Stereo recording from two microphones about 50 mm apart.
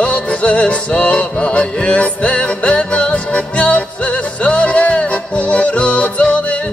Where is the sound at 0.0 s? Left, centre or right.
Left.